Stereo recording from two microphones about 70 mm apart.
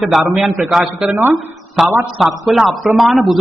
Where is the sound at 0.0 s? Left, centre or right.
Centre.